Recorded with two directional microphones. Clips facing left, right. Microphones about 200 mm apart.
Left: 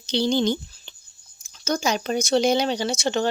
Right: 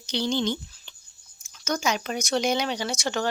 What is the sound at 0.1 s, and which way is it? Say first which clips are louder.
Speech: left 5 dB; 35° left (ahead or behind).